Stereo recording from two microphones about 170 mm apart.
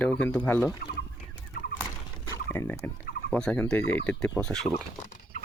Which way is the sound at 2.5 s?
10° left (ahead or behind).